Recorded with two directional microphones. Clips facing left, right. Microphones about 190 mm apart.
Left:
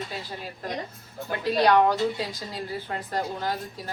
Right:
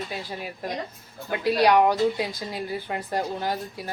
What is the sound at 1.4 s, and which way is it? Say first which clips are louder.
Speech: right 1 dB; 10° right (ahead or behind).